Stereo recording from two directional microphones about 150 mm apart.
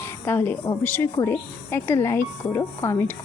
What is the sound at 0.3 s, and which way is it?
A woman's voice, 15° left (ahead or behind).